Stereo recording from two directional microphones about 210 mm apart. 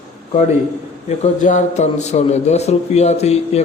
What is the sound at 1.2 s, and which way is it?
Speech, 35° left (ahead or behind).